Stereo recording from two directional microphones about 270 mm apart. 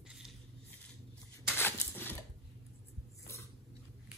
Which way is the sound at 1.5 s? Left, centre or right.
Centre.